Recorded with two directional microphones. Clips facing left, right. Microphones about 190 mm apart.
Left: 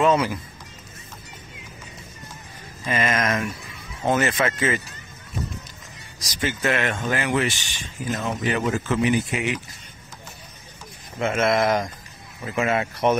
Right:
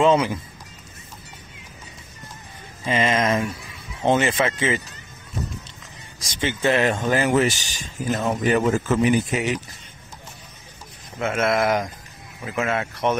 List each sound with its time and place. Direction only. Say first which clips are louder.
0.0 s speech: right 2 dB; 25° right (ahead or behind)
2.8 s speech: right 3 dB; 20° right (ahead or behind)
6.1 s speech: right 1 dB; 30° right (ahead or behind)
11.1 s speech: left 1 dB; 5° right (ahead or behind)